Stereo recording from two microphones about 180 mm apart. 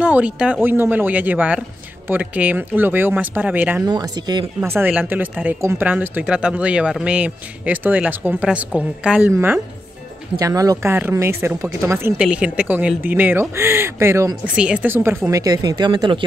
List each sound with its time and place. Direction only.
0.0 s speech: 5° right (ahead or behind)
3.8 s speech: 20° right (ahead or behind)
4.6 s speech: 10° right (ahead or behind); by 16.3 s 25° right (ahead or behind)